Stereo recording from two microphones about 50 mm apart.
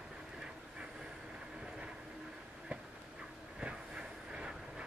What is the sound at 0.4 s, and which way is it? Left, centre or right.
Train, centre.